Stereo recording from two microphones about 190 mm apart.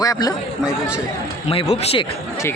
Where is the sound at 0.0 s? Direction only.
20° left (ahead or behind).